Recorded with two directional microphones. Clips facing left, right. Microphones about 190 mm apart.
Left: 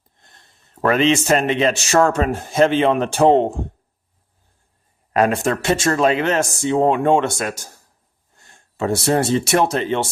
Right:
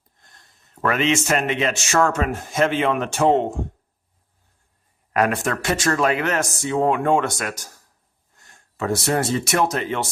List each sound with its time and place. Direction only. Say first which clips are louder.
0.2 s speech: left 2 dB; 25° left (ahead or behind)
5.1 s speech: left 4 dB; 25° left (ahead or behind)